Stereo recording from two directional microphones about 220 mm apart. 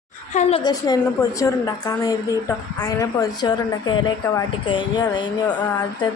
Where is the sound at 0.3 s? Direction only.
20° left (ahead or behind).